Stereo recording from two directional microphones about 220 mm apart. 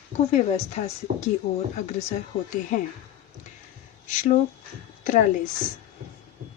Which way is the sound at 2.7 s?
35° left (ahead or behind).